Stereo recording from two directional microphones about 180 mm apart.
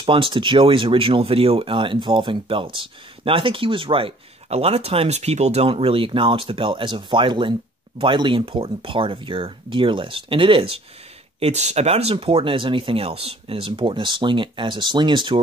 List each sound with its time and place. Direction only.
0.0 s speech: 30° right (ahead or behind)